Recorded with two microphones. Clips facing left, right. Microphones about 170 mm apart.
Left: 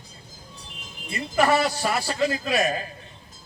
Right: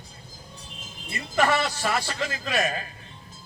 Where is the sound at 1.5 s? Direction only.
35° left (ahead or behind).